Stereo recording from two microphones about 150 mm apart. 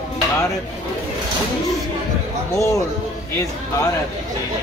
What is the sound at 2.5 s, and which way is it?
Speech, 20° left (ahead or behind).